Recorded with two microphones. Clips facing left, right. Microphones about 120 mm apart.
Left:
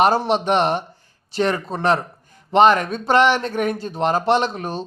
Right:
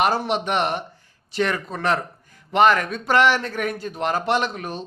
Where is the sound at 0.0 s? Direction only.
30° left (ahead or behind).